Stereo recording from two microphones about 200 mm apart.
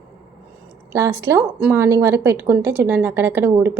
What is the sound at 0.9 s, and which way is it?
A woman's voice, 15° right (ahead or behind).